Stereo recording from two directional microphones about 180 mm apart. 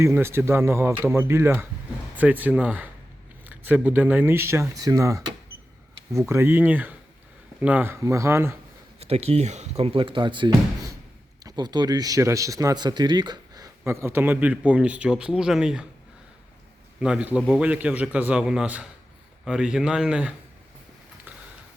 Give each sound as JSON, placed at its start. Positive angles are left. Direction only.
{"t": 0.0, "sound": "speech", "side_deg": -15}
{"t": 9.0, "sound": "speech", "side_deg": -35}
{"t": 17.0, "sound": "speech", "side_deg": -5}